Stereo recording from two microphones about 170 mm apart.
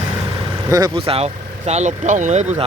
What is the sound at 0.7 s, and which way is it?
Speech, 30° right (ahead or behind).